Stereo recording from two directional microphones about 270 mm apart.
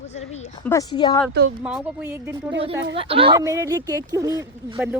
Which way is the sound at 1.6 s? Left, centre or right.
Centre.